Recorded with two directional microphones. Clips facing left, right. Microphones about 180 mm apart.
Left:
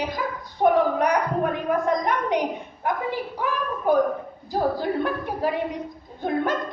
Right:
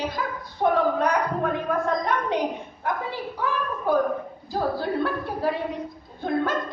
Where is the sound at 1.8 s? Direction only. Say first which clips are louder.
Left 2 dB; 15° left (ahead or behind).